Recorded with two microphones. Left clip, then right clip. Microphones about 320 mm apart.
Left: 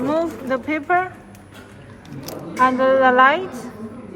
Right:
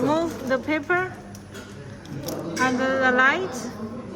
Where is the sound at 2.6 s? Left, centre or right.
Centre.